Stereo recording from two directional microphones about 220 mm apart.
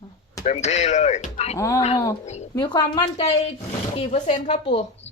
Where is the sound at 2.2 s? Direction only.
30° left (ahead or behind).